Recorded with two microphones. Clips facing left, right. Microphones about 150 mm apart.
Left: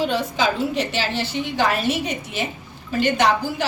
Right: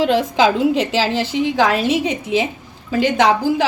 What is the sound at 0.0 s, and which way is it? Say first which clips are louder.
A woman's voice: right 6 dB; 90° right.